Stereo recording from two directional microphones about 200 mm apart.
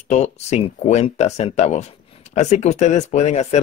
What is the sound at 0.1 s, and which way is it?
Speech, 35° left (ahead or behind).